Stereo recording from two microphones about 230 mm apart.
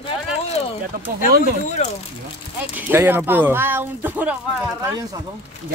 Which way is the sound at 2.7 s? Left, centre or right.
Centre.